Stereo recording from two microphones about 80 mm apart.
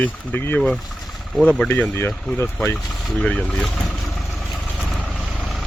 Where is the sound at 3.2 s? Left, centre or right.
Centre.